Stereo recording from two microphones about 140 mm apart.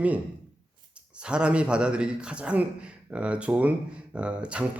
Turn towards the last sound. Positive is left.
turn(degrees=-10)  # may be behind; listen again after turning